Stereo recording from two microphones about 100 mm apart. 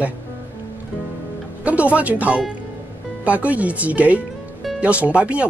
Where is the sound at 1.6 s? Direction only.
15° right (ahead or behind).